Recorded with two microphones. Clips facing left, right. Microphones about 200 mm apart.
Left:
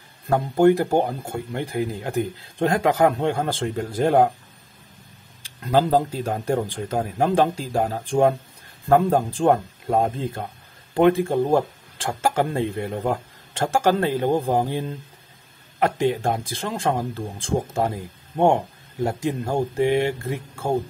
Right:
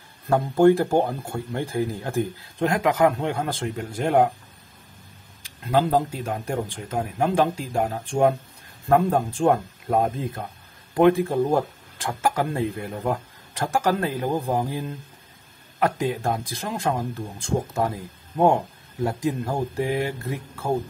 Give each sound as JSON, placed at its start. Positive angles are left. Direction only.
{"t": 0.6, "sound": "speech", "side_deg": 20}
{"t": 2.6, "sound": "speech", "side_deg": 30}
{"t": 5.4, "sound": "speech", "side_deg": 35}